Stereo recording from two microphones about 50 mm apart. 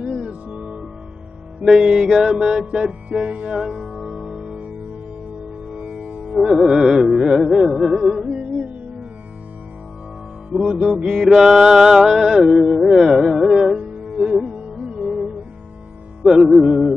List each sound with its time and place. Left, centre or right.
0.3 s music: right
1.7 s music: centre
5.7 s music: right
6.3 s music: centre
8.3 s music: right
10.6 s music: centre
13.7 s music: centre
16.4 s music: centre